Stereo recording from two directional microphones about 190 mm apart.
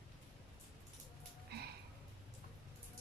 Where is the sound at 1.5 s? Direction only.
60° right (ahead or behind).